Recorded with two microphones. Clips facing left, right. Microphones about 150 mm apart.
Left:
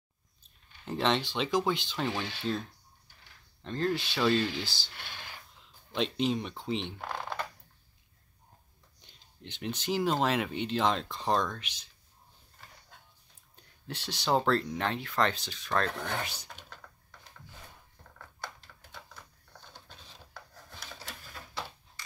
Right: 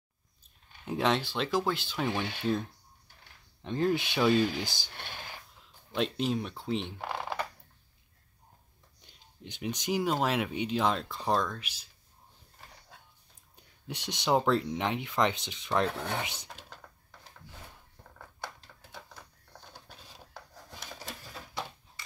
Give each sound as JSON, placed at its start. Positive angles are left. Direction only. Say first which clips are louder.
{"t": 0.8, "sound": "speech", "louder": "right 1 dB", "side_deg": -5}
{"t": 3.6, "sound": "speech", "louder": "right 3 dB", "side_deg": -15}
{"t": 5.9, "sound": "speech", "louder": "even", "side_deg": -5}
{"t": 9.0, "sound": "speech", "louder": "right 1 dB", "side_deg": -5}
{"t": 13.6, "sound": "speech", "louder": "even", "side_deg": -15}
{"t": 19.7, "sound": "a sound", "louder": "right 1 dB", "side_deg": -10}
{"t": 21.5, "sound": "a sound", "louder": "right 1 dB", "side_deg": -10}